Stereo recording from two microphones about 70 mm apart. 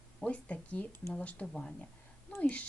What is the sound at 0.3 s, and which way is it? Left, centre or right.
Speech, centre.